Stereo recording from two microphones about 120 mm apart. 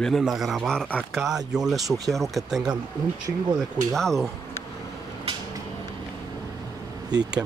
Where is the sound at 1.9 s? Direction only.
30° right (ahead or behind).